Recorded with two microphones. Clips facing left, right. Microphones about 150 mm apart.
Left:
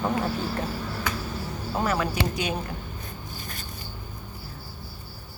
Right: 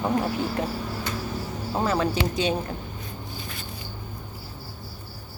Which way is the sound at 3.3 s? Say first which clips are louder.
Right 2 dB; 45° left (ahead or behind).